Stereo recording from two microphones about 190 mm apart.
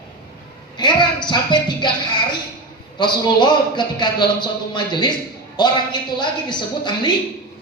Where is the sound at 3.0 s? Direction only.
25° left (ahead or behind).